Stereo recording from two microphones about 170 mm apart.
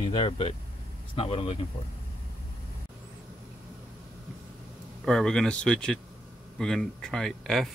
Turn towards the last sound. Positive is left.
turn(degrees=0)  # may be behind; listen again after turning